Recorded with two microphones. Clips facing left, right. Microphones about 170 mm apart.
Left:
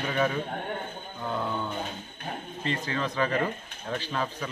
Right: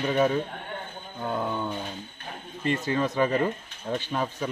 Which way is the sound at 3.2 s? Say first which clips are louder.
Right 3 dB; 20° right (ahead or behind).